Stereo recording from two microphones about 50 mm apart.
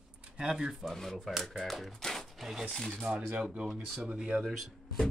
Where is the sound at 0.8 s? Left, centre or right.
Centre.